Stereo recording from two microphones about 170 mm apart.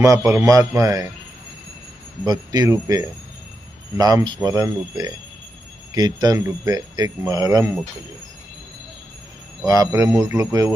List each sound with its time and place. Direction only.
0.0 s speech: 20° right (ahead or behind)
2.2 s speech: 25° right (ahead or behind)
9.6 s speech: 20° right (ahead or behind)